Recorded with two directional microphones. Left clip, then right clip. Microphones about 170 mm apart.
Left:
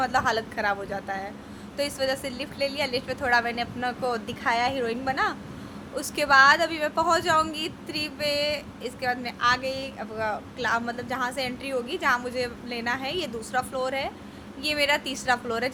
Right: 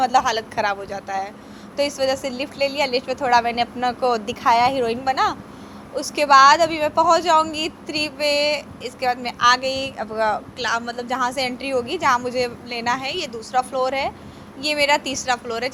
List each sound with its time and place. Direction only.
0.0 s speech: 15° right (ahead or behind)